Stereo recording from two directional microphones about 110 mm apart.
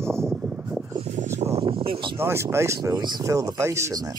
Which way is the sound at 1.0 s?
90° right.